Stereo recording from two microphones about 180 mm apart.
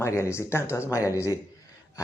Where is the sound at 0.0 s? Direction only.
15° left (ahead or behind).